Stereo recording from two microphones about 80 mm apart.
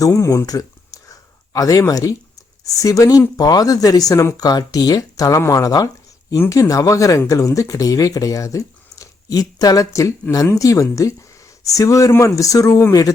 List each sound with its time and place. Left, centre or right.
0.0 s a sound: left
1.9 s speech: left
4.4 s speech: left